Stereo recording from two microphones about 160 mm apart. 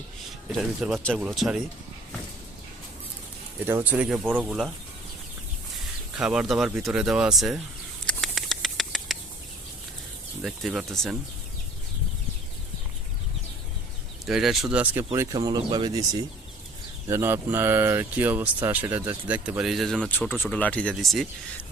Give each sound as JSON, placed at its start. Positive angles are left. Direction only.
{"t": 0.8, "sound": "speech", "side_deg": 0}
{"t": 3.6, "sound": "speech", "side_deg": -10}
{"t": 6.1, "sound": "speech", "side_deg": -5}
{"t": 8.0, "sound": "rodents", "side_deg": 0}
{"t": 10.4, "sound": "speech", "side_deg": 0}
{"t": 14.3, "sound": "speech", "side_deg": 0}
{"t": 15.1, "sound": "speech", "side_deg": -20}
{"t": 17.1, "sound": "speech", "side_deg": -15}